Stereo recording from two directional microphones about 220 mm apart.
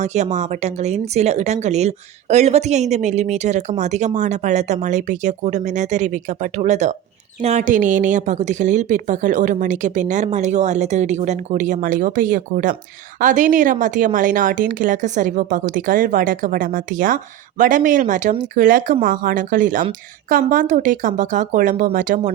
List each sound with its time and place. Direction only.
0.0 s a woman's voice: 30° right (ahead or behind)